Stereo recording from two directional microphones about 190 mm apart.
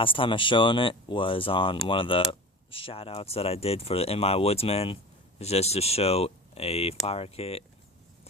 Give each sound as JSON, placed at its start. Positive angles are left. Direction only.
{"t": 0.0, "sound": "speech", "side_deg": 25}